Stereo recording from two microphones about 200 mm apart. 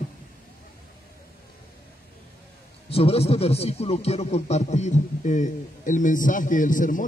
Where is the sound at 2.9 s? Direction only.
30° left (ahead or behind).